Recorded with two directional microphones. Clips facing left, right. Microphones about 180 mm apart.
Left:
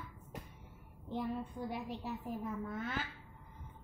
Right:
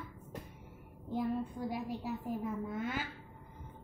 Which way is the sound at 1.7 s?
10° right (ahead or behind).